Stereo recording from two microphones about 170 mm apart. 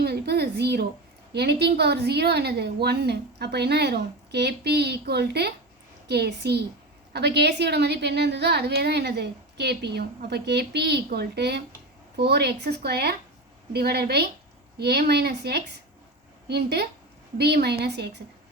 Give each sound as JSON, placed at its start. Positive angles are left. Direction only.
{"t": 0.0, "sound": "a woman's voice", "side_deg": -70}